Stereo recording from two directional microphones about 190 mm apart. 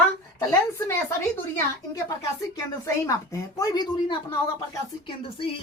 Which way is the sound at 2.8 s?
15° left (ahead or behind).